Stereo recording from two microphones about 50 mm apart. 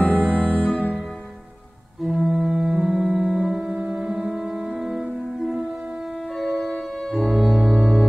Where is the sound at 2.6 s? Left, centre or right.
Centre.